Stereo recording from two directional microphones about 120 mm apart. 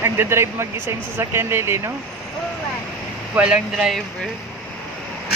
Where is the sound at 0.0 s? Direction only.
20° right (ahead or behind).